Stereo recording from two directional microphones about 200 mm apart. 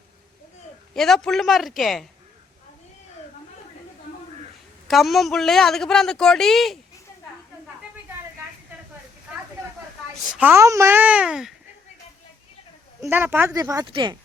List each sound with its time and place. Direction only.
0.9 s speech: centre (ahead or behind)
4.9 s speech: centre (ahead or behind)
9.3 s a sound: 5° right (ahead or behind)
10.2 s a child's voice: 5° right (ahead or behind)
13.0 s a child's voice: 10° right (ahead or behind)